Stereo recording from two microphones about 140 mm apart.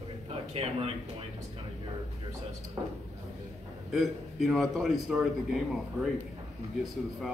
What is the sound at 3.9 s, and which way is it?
A man's voice, centre (ahead or behind).